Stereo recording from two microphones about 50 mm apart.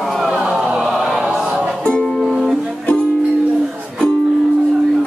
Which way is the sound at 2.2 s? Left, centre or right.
Centre.